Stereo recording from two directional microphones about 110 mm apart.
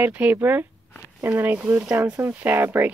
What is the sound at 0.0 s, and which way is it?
Speech, 15° right (ahead or behind).